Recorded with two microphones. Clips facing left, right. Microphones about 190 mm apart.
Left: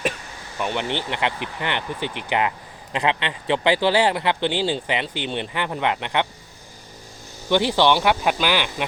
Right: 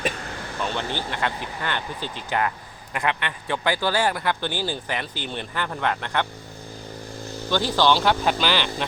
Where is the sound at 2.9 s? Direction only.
20° left (ahead or behind).